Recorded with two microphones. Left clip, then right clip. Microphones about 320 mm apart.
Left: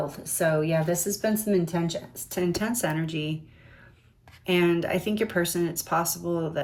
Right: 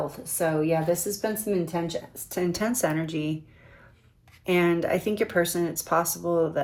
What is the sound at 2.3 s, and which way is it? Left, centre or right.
Speech, centre.